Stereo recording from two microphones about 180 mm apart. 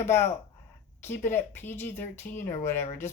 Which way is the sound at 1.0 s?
10° left (ahead or behind).